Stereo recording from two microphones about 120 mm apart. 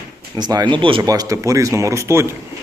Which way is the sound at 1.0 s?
30° right (ahead or behind).